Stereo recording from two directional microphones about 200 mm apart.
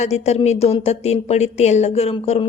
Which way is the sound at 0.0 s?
35° left (ahead or behind).